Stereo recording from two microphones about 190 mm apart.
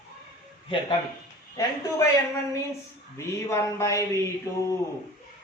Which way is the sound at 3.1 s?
15° left (ahead or behind).